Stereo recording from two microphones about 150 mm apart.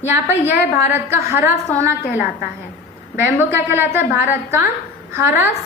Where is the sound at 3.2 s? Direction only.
15° right (ahead or behind).